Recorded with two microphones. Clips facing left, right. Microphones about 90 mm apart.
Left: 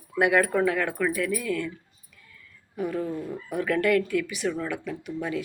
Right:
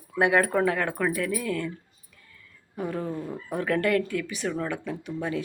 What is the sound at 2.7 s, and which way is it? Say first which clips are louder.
Speech: left 2 dB; 30° right (ahead or behind).